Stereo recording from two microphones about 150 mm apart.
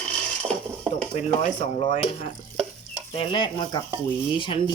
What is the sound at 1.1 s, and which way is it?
Speech, 50° left (ahead or behind).